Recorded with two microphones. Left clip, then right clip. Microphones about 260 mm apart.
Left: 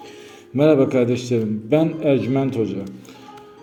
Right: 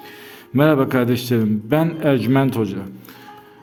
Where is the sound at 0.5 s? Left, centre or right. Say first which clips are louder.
Left 1 dB; right.